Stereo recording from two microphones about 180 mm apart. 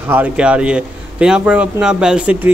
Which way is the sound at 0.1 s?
5° right (ahead or behind).